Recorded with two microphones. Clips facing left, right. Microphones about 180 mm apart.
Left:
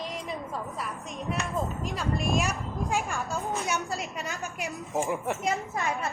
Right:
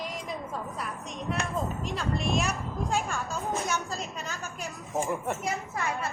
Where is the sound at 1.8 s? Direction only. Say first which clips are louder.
Left 1 dB; centre (ahead or behind).